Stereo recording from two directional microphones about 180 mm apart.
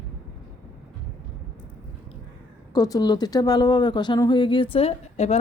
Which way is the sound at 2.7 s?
20° left (ahead or behind).